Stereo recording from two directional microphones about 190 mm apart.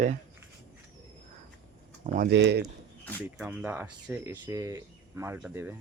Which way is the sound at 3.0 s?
5° left (ahead or behind).